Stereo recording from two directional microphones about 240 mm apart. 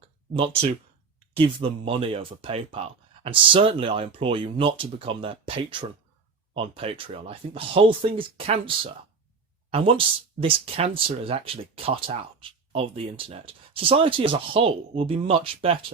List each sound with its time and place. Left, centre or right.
0.3 s speech: right